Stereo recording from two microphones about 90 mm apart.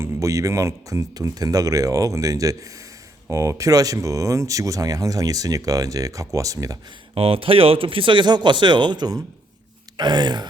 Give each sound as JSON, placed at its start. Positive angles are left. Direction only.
{"t": 0.0, "sound": "speech", "side_deg": -35}
{"t": 7.1, "sound": "speech", "side_deg": -90}
{"t": 10.0, "sound": "gasp", "side_deg": -55}